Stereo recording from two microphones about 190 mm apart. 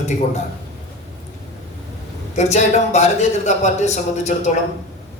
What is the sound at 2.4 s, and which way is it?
A man's voice, 35° left (ahead or behind).